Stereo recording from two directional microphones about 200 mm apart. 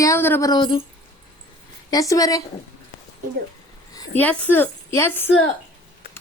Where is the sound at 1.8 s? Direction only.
15° left (ahead or behind).